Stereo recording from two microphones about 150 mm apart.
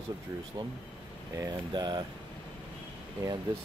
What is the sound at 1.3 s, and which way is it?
Speech, 25° right (ahead or behind).